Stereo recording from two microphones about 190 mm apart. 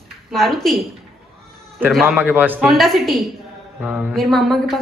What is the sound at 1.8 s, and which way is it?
A woman's voice, centre (ahead or behind).